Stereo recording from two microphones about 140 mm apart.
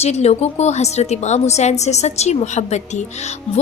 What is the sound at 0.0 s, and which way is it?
A woman's voice, 50° left (ahead or behind).